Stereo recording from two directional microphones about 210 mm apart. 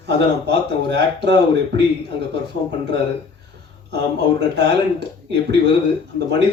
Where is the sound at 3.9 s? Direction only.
55° right (ahead or behind).